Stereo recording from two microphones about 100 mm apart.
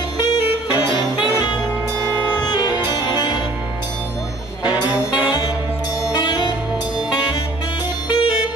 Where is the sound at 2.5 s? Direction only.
45° left (ahead or behind).